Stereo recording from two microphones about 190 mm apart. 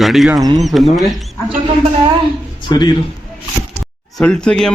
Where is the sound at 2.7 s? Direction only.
20° left (ahead or behind).